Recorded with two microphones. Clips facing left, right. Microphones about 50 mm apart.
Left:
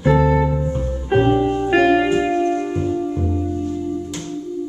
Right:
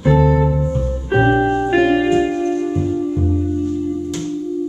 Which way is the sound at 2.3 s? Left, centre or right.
Left.